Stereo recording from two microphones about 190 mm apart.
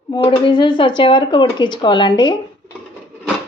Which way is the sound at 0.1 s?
25° left (ahead or behind).